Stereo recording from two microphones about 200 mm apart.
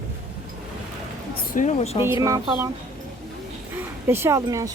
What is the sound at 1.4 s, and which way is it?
Speech, 40° left (ahead or behind).